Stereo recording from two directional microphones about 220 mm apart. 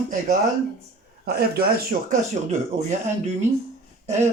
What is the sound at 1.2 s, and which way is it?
Speech, 45° right (ahead or behind).